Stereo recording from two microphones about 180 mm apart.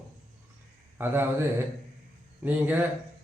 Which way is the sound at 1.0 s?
10° right (ahead or behind).